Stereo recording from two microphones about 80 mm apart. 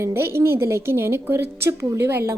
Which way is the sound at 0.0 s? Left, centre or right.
Right.